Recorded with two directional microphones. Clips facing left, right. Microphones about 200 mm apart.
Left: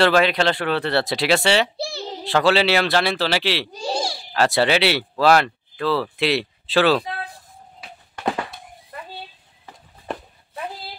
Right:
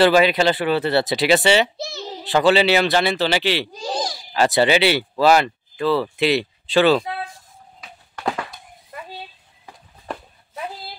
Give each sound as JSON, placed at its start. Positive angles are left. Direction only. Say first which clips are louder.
{"t": 0.0, "sound": "speech", "louder": "right 2 dB", "side_deg": -5}
{"t": 1.8, "sound": "a sound", "louder": "left 2 dB", "side_deg": 30}
{"t": 2.2, "sound": "speech", "louder": "right 2 dB", "side_deg": 0}
{"t": 4.3, "sound": "speech", "louder": "right 2 dB", "side_deg": 0}